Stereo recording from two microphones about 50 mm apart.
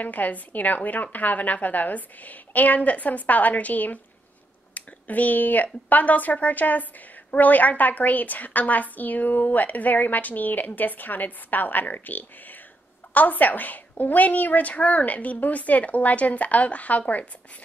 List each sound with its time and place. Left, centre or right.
0.0 s speech: left